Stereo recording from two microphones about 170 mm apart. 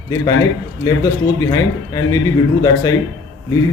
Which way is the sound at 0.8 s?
20° left (ahead or behind).